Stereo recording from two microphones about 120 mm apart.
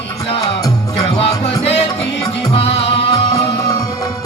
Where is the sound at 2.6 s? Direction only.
55° left (ahead or behind).